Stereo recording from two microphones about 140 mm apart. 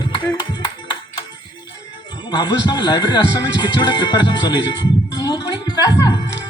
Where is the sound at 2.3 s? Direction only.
30° left (ahead or behind).